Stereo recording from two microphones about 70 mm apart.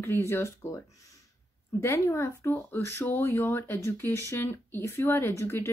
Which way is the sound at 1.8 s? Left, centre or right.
Left.